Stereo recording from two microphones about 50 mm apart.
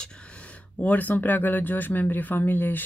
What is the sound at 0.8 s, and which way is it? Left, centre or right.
Speech, left.